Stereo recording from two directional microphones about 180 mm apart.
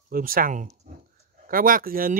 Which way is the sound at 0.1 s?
50° right (ahead or behind).